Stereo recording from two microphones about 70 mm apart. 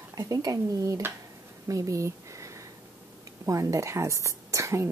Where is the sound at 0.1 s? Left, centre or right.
Right.